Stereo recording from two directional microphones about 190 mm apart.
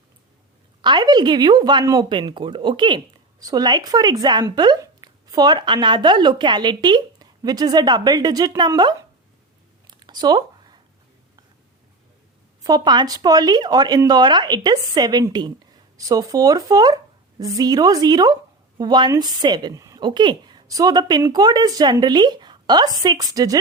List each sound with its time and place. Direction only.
0.8 s speech: 25° right (ahead or behind)
9.8 s a sound: 25° right (ahead or behind)
12.6 s speech: 20° right (ahead or behind)